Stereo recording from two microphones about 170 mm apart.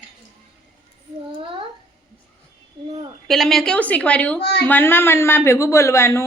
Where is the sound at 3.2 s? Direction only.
Centre (ahead or behind).